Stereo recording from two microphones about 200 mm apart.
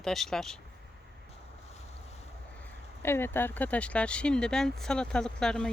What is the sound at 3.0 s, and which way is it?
Speech, 10° left (ahead or behind).